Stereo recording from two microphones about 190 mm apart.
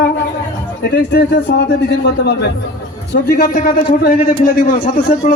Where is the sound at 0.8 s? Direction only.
60° left (ahead or behind).